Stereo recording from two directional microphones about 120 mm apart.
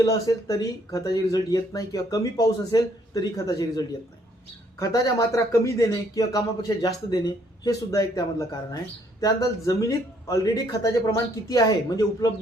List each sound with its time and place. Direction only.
0.0 s a man's voice: 30° left (ahead or behind)
10.2 s speech: 30° left (ahead or behind)